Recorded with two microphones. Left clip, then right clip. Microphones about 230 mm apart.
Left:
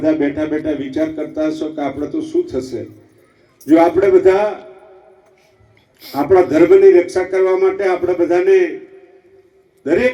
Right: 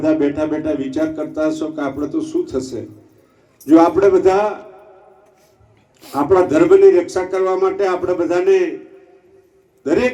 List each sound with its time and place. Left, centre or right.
0.0 s speech: left
6.1 s speech: left
9.8 s a man's voice: left